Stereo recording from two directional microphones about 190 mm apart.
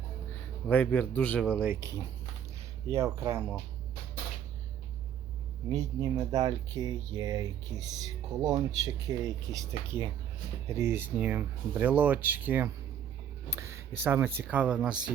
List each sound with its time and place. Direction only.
0.7 s a man's voice: 10° left (ahead or behind)
1.5 s speech: 10° right (ahead or behind)
5.7 s speech: 20° right (ahead or behind)